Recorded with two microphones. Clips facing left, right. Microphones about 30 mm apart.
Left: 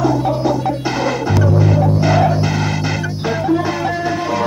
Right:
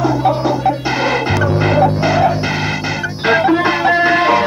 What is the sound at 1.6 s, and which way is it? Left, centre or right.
Throbbing, right.